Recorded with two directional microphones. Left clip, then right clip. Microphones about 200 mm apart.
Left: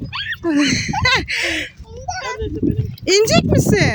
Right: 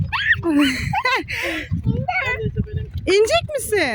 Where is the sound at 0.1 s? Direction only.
35° right (ahead or behind).